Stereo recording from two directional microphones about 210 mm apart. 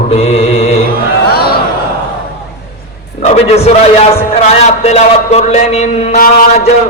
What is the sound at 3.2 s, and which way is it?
A man's voice, 30° left (ahead or behind).